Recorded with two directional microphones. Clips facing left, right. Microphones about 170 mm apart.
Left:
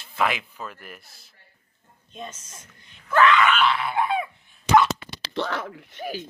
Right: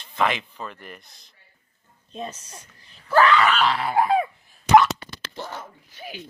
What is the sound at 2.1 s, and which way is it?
Speech, 35° right (ahead or behind).